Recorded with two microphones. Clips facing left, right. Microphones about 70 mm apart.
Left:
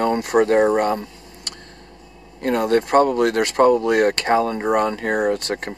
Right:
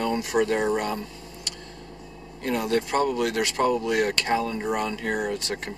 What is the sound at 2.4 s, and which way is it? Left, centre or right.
Speech, left.